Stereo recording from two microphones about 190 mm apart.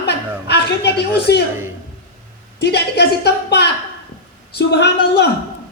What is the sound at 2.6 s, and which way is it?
A woman's voice, 60° left (ahead or behind).